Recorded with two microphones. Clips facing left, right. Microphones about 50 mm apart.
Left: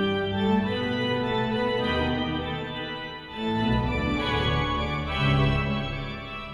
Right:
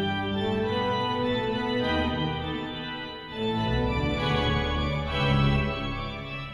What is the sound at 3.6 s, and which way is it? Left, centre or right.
Organ, centre.